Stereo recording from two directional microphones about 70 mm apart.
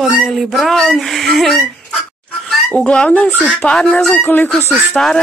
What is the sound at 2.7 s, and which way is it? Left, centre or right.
Speech, centre.